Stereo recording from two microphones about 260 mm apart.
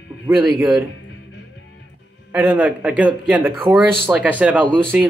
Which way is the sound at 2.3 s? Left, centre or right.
Centre.